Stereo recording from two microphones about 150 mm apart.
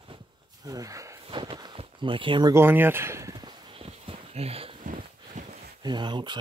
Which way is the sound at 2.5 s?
15° right (ahead or behind).